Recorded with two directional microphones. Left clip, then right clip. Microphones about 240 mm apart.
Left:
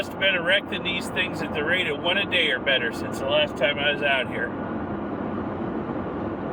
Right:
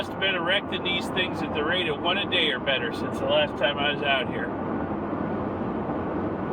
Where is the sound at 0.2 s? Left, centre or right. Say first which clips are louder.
Left 3 dB; left.